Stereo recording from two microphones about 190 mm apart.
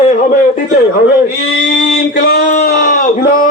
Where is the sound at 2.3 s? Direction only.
45° left (ahead or behind).